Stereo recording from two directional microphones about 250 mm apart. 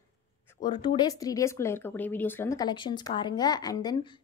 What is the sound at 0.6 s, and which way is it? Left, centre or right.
Speech, centre.